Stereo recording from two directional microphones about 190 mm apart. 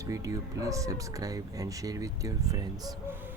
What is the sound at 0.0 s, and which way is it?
Speech, 20° right (ahead or behind).